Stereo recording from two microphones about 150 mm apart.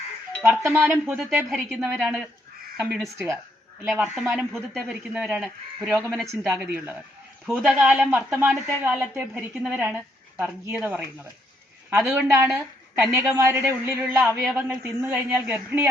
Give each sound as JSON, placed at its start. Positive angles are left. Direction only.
{"t": 0.4, "sound": "a woman's voice", "side_deg": -10}
{"t": 14.3, "sound": "speech", "side_deg": 0}
{"t": 14.6, "sound": "a woman's voice", "side_deg": -15}